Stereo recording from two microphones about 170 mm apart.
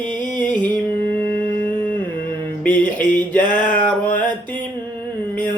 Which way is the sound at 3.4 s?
50° left (ahead or behind).